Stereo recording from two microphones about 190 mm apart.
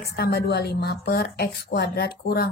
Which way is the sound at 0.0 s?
60° left (ahead or behind).